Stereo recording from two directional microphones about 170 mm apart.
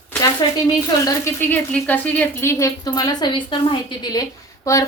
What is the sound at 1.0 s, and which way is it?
Speech, 15° left (ahead or behind).